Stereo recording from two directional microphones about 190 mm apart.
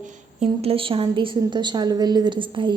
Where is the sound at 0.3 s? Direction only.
30° right (ahead or behind).